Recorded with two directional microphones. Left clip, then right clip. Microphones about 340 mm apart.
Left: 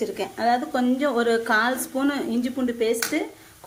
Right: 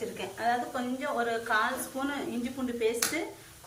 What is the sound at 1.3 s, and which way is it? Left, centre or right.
A woman's voice, centre.